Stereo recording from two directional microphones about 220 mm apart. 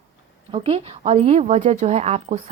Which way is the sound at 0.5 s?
25° right (ahead or behind).